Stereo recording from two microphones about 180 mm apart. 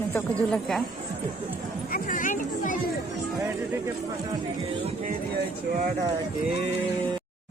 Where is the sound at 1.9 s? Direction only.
45° left (ahead or behind).